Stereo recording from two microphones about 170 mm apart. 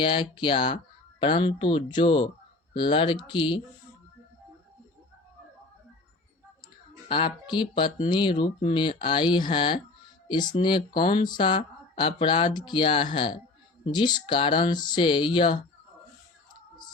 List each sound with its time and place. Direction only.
0.0 s speech: 30° left (ahead or behind)
7.1 s speech: 30° left (ahead or behind)